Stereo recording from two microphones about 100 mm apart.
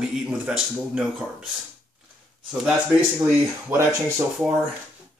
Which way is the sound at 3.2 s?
20° right (ahead or behind).